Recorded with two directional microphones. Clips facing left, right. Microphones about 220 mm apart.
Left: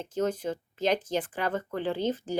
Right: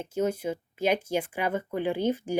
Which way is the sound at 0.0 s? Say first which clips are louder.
Right 1 dB; 10° right (ahead or behind).